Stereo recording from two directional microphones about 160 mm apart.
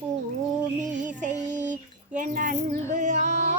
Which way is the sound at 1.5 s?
50° right (ahead or behind).